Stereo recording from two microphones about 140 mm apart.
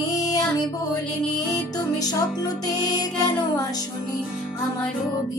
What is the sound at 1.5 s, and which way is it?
Music, 25° left (ahead or behind).